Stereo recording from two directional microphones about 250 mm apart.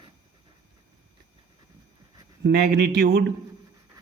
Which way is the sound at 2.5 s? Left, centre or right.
Right.